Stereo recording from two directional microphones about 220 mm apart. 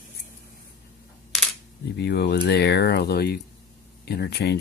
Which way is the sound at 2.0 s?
50° left (ahead or behind).